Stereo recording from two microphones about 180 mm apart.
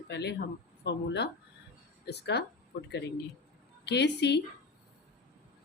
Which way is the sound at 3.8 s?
70° left (ahead or behind).